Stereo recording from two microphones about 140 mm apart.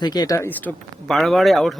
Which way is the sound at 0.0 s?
30° left (ahead or behind).